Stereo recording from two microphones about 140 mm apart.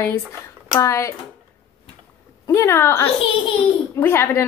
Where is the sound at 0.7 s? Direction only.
20° left (ahead or behind).